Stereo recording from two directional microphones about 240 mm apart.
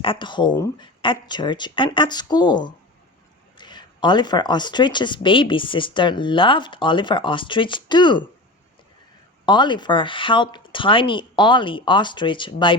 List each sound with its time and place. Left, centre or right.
0.0 s speech: left
9.5 s speech: centre